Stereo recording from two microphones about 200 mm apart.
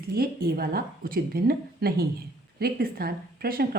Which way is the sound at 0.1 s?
50° right (ahead or behind).